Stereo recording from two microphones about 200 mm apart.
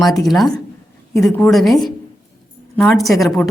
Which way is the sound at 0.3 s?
Centre (ahead or behind).